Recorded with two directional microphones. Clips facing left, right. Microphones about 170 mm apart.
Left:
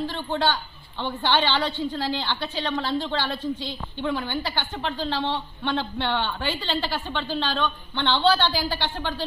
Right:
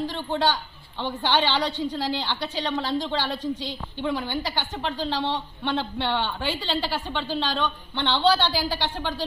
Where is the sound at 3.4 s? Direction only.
90° right.